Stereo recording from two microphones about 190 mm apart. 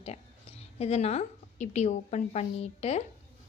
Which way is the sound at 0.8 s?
35° left (ahead or behind).